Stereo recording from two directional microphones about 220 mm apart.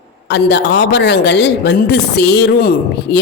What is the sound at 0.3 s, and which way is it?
Speech, 50° left (ahead or behind).